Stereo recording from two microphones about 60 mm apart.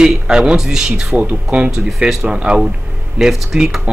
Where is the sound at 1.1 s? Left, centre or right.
Right.